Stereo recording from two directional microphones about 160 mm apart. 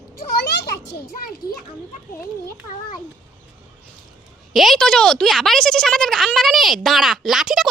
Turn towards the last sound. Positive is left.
turn(degrees=0)  # may be behind; listen again after turning